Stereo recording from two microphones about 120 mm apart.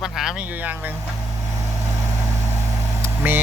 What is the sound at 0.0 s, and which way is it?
Speech, 5° right (ahead or behind).